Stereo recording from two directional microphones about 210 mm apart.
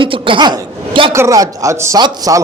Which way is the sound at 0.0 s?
25° right (ahead or behind).